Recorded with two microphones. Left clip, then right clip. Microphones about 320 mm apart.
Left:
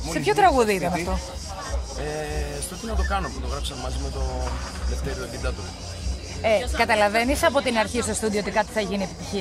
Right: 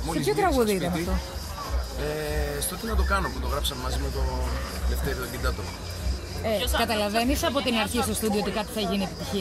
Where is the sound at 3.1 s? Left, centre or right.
Centre.